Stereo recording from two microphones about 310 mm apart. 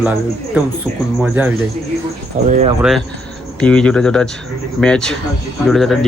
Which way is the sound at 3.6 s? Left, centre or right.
Centre.